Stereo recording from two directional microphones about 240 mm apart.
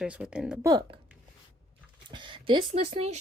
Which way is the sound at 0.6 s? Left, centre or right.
Centre.